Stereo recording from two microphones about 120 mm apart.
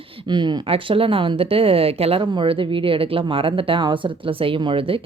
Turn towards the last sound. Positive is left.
turn(degrees=-50)  # may be behind; listen again after turning